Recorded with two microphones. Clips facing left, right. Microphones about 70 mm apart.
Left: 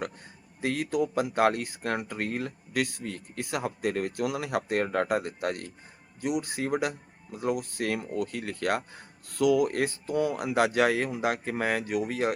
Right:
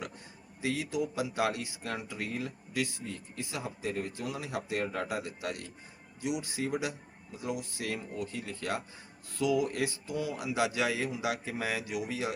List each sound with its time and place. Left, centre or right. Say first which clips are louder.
0.6 s speech: left 5 dB; left